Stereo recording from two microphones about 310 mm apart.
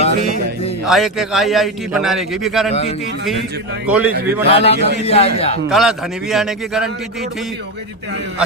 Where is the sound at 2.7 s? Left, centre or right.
Centre.